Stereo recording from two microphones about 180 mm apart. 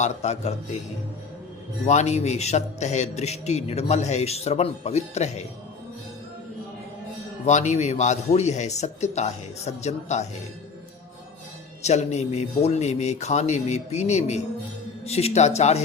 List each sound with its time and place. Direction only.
0.0 s a man's voice: 40° left (ahead or behind)
1.9 s a man's voice: 40° left (ahead or behind)
7.4 s a man's voice: 40° left (ahead or behind)
11.8 s a man's voice: 40° left (ahead or behind)